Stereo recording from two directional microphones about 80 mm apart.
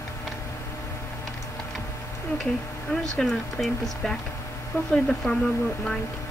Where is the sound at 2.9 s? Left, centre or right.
Centre.